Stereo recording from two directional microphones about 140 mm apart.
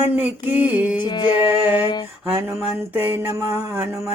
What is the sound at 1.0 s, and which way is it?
Music, 30° left (ahead or behind).